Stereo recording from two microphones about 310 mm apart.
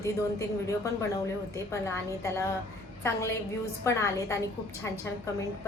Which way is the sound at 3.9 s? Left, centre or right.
Centre.